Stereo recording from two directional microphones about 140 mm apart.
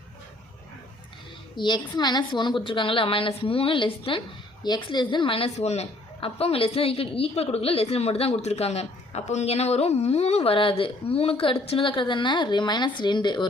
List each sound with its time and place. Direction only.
1.5 s a woman's voice: 30° left (ahead or behind)